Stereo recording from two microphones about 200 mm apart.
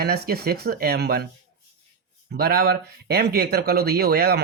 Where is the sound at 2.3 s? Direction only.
50° right (ahead or behind).